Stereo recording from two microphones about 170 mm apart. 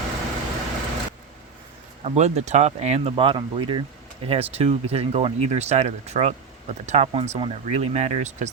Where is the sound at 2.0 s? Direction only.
40° right (ahead or behind).